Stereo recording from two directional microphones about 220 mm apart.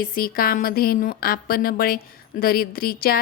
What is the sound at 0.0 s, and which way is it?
A woman's voice, 40° left (ahead or behind).